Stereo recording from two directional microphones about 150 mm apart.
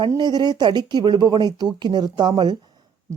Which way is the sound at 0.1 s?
30° right (ahead or behind).